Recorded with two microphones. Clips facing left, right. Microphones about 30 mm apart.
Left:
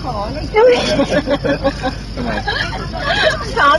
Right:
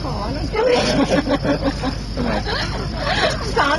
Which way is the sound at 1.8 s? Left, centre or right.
Left.